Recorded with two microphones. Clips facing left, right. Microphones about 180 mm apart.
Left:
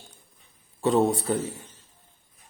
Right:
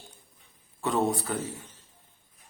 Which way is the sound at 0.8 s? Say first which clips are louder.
Left 5 dB; 25° left (ahead or behind).